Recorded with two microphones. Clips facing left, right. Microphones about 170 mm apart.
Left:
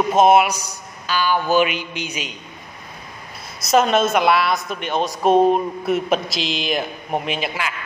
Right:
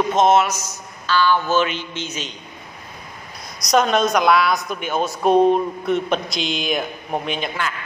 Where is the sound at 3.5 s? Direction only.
5° left (ahead or behind).